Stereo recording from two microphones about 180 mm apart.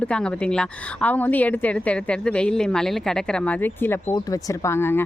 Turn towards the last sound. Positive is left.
turn(degrees=10)  # may be behind; listen again after turning